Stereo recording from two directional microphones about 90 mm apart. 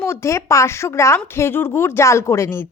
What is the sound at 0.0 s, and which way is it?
A woman's voice, 30° left (ahead or behind).